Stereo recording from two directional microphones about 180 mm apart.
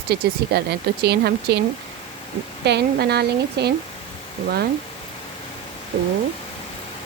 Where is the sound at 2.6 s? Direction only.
65° right (ahead or behind).